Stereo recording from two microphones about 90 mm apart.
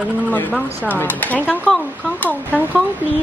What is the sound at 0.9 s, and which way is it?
A woman's voice, 20° left (ahead or behind).